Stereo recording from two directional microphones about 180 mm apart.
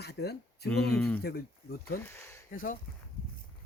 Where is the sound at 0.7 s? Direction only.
5° left (ahead or behind).